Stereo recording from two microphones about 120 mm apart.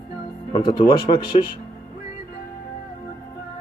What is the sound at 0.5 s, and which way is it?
Speech, 45° left (ahead or behind).